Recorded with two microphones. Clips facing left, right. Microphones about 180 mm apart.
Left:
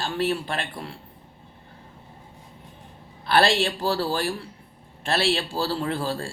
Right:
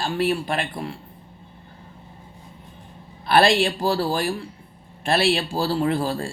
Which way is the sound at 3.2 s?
15° right (ahead or behind).